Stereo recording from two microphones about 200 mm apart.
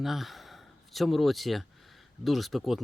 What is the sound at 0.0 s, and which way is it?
Speech, centre (ahead or behind).